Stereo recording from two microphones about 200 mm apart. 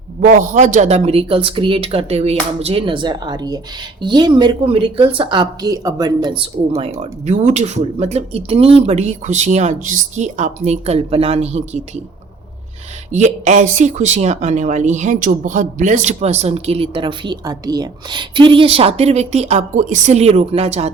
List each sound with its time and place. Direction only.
0.2 s speech: 40° right (ahead or behind)
13.1 s speech: 35° right (ahead or behind)